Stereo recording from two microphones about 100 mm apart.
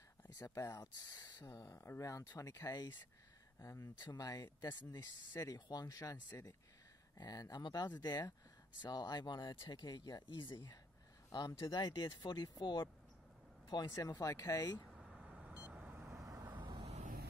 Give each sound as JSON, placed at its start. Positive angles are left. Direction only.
{"t": 0.4, "sound": "speech", "side_deg": 25}
{"t": 0.9, "sound": "speech", "side_deg": 45}
{"t": 14.9, "sound": "vehicle", "side_deg": -5}
{"t": 16.5, "sound": "vehicle", "side_deg": -50}